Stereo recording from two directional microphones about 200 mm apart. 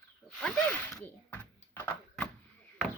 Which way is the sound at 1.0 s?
5° left (ahead or behind).